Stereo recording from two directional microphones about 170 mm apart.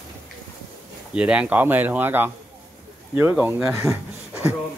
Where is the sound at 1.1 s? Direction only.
5° right (ahead or behind).